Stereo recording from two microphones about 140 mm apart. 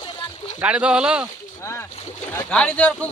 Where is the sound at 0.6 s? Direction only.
5° right (ahead or behind).